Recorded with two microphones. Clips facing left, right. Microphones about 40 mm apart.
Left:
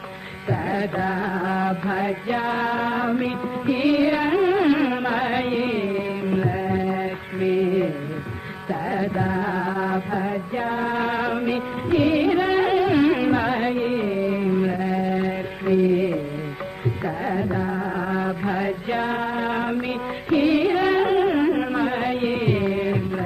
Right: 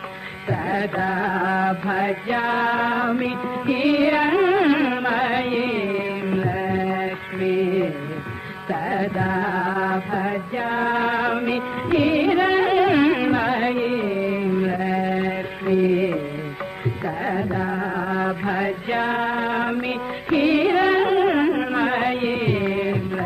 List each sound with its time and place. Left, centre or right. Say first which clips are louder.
0.7 s music: right 1 dB; centre
6.3 s music: even; centre
6.6 s music: right 1 dB; right
7.4 s carnatic music: even; centre
8.7 s music: right 1 dB; centre
12.7 s carnatic music: right 1 dB; right
13.1 s carnatic music: even; centre
14.3 s a sound: even; centre
15.8 s carnatic music: right 1 dB; right
17.2 s carnatic music: right 1 dB; centre
18.2 s music: right 1 dB; centre
21.3 s carnatic music: right 1 dB; right
22.0 s music: right 1 dB; right
22.3 s carnatic music: even; centre